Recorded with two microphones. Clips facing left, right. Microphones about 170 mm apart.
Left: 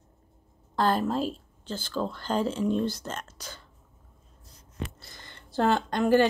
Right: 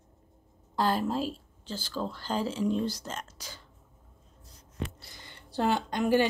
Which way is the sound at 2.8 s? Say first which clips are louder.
Left 2 dB; 10° right (ahead or behind).